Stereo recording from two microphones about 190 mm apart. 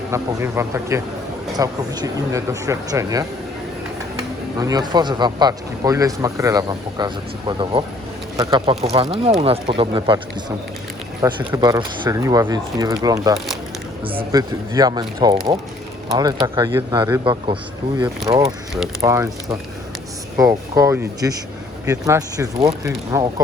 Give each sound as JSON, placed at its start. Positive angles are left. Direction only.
{"t": 0.1, "sound": "speech", "side_deg": -15}
{"t": 4.6, "sound": "speech", "side_deg": -20}
{"t": 11.2, "sound": "speech", "side_deg": -20}